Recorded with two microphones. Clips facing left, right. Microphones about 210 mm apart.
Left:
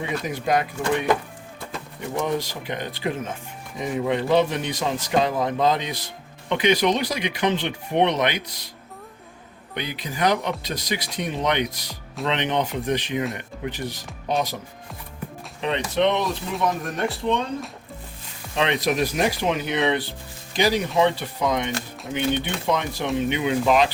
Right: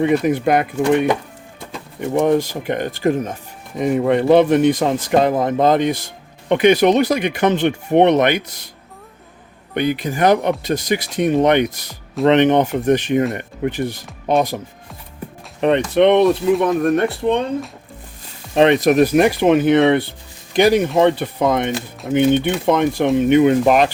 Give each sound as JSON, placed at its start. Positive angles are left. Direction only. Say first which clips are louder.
{"t": 0.0, "sound": "speech", "louder": "right 11 dB", "side_deg": -55}
{"t": 2.1, "sound": "speech", "louder": "right 10 dB", "side_deg": -55}
{"t": 3.8, "sound": "speech", "louder": "right 8 dB", "side_deg": -55}
{"t": 9.7, "sound": "speech", "louder": "right 11 dB", "side_deg": -55}
{"t": 15.6, "sound": "speech", "louder": "right 8 dB", "side_deg": -60}
{"t": 18.5, "sound": "speech", "louder": "right 10 dB", "side_deg": -50}